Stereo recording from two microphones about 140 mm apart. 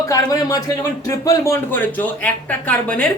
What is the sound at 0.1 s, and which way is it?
Speech, 25° left (ahead or behind).